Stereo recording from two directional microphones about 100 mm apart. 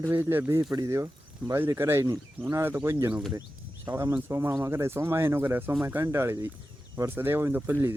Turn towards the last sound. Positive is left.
turn(degrees=-25)  # may be behind; listen again after turning